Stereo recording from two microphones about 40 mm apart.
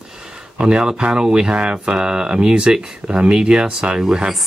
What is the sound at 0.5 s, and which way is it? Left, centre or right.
Speech, right.